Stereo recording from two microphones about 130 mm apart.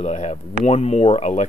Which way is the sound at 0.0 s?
60° left (ahead or behind).